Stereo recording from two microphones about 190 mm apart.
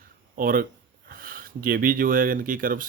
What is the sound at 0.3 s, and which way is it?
Speech, 45° right (ahead or behind).